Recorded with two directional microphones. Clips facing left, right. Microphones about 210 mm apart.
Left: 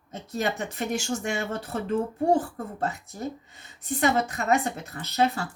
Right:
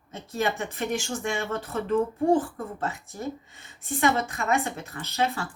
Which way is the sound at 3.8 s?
40° left (ahead or behind).